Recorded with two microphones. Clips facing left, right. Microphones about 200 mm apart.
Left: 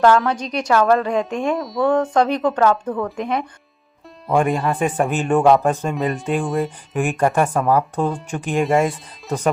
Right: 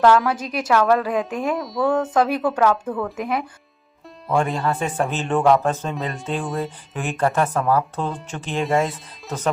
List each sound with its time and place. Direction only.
0.0 s a woman's voice: 5° right (ahead or behind)
4.4 s a woman's voice: centre (ahead or behind)
5.0 s speech: 10° left (ahead or behind)
5.9 s a woman's voice: centre (ahead or behind)
7.0 s speech: 15° left (ahead or behind)
8.6 s a woman's voice: centre (ahead or behind)